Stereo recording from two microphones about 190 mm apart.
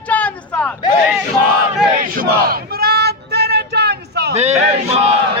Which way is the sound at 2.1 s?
55° right (ahead or behind).